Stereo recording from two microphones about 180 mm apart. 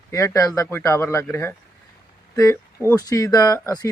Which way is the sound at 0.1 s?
15° left (ahead or behind).